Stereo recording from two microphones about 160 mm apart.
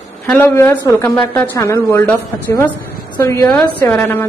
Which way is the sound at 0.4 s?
15° left (ahead or behind).